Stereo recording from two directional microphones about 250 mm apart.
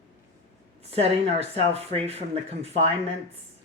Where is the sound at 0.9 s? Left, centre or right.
Right.